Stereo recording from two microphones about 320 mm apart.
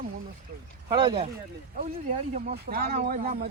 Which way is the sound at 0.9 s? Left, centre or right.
Centre.